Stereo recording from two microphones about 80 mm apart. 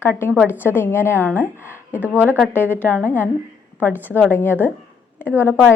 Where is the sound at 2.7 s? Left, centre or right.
Left.